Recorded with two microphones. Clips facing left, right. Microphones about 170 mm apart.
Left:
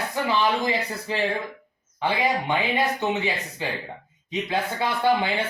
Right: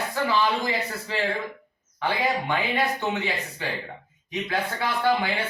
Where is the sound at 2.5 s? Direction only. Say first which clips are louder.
Left 1 dB; 20° left (ahead or behind).